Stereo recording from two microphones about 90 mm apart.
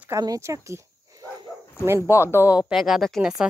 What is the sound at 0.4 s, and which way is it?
Speech, 30° right (ahead or behind).